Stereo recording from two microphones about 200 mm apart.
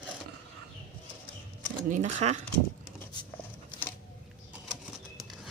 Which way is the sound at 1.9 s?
35° right (ahead or behind).